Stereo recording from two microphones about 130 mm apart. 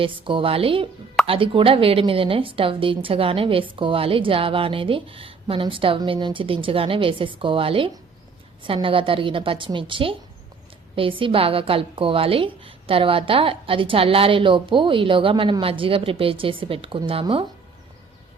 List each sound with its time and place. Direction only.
0.0 s a woman's voice: 45° right (ahead or behind)